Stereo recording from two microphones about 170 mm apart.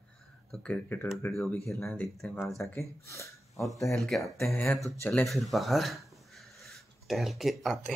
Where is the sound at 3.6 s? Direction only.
Centre (ahead or behind).